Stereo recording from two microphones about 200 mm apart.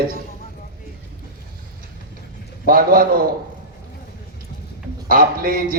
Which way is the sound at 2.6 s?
45° right (ahead or behind).